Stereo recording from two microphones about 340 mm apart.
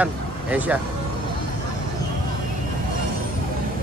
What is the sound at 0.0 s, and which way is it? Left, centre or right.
Speech, centre.